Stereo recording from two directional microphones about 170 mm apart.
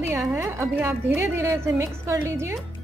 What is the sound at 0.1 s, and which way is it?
A woman's voice, 15° right (ahead or behind).